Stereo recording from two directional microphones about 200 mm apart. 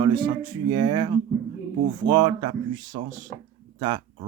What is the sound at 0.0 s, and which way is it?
Speech, 25° right (ahead or behind).